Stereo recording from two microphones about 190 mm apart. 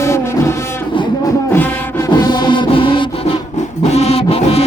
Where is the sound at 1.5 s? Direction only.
20° left (ahead or behind).